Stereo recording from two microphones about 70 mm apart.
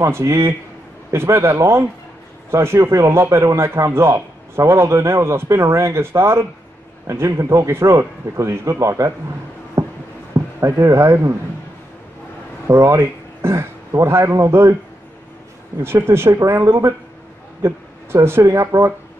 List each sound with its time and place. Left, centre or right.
0.0 s a man's voice: right
9.8 s a sound: right
10.6 s a man's voice: right
12.6 s a man's voice: right
15.8 s a man's voice: right